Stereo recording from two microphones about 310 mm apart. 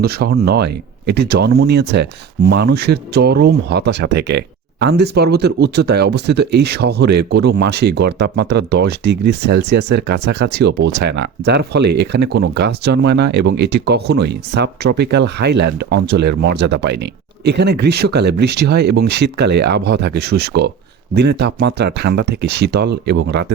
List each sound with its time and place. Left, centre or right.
0.0 s speech: right